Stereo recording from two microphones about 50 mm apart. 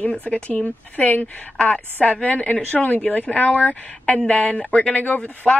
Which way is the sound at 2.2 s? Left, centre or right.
Left.